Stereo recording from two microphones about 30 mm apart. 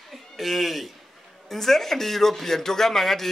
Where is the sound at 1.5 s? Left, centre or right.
Centre.